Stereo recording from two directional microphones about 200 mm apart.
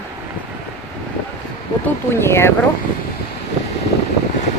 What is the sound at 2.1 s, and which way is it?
Speech, 10° left (ahead or behind).